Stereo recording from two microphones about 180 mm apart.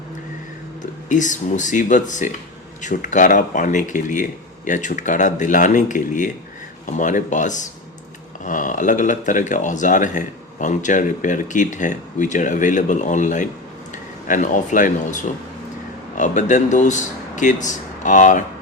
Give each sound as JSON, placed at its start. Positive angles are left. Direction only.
{"t": 0.8, "sound": "speech", "side_deg": 45}